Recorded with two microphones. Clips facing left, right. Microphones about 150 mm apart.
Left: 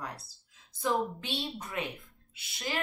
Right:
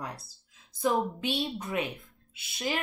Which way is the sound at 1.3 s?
Centre (ahead or behind).